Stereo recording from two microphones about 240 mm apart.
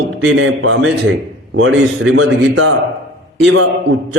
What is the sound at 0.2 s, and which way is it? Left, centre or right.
A man's voice, right.